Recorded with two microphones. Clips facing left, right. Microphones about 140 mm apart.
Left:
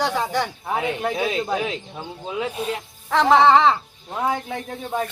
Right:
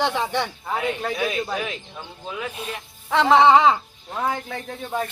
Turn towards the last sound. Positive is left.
turn(degrees=10)  # may be behind; listen again after turning